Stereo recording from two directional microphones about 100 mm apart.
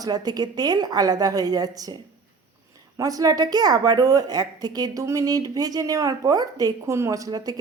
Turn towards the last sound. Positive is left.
turn(degrees=-40)  # may be behind; listen again after turning